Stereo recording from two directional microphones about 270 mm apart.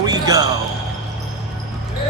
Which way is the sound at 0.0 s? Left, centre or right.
Centre.